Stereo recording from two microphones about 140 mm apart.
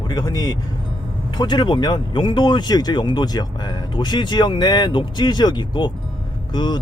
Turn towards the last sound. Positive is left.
turn(degrees=35)  # may be behind; listen again after turning